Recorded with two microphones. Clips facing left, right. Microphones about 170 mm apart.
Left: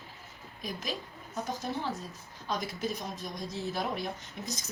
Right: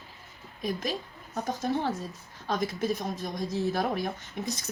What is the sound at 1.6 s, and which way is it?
Speech, 65° right (ahead or behind).